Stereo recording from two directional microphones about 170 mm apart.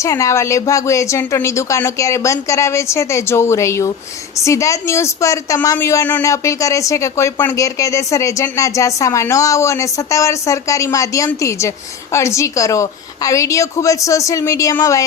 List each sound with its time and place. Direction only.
0.0 s a woman's voice: 20° left (ahead or behind)